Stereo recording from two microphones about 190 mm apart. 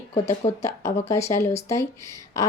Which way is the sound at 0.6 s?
15° left (ahead or behind).